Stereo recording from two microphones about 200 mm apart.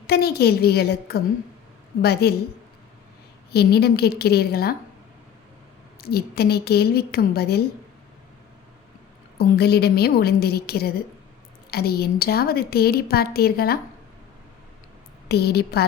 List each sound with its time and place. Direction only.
0.1 s a woman's voice: 50° left (ahead or behind)
3.5 s a woman's voice: 55° left (ahead or behind)
6.0 s a woman's voice: 50° left (ahead or behind)
9.4 s a woman's voice: 55° left (ahead or behind)
15.3 s a woman's voice: 55° left (ahead or behind)